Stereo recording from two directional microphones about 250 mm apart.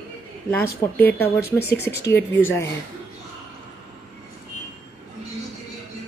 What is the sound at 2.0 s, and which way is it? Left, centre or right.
Speech, left.